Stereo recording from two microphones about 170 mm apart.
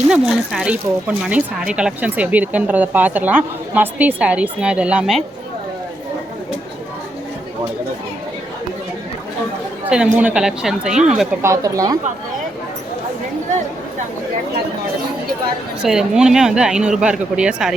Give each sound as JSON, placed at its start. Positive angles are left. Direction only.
{"t": 0.1, "sound": "speech", "side_deg": -5}
{"t": 9.9, "sound": "speech", "side_deg": -5}
{"t": 11.4, "sound": "speech", "side_deg": -20}
{"t": 15.8, "sound": "speech", "side_deg": -5}